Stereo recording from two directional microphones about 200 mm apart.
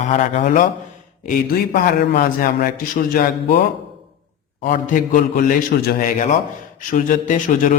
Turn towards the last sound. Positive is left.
turn(degrees=40)  # may be behind; listen again after turning